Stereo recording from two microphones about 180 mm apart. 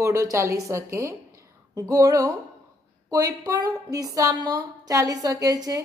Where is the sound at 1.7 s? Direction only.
20° right (ahead or behind).